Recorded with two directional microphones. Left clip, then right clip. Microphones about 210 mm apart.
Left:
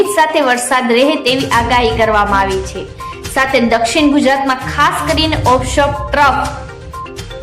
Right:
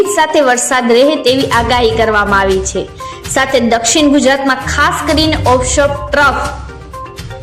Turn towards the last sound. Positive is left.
turn(degrees=-15)  # may be behind; listen again after turning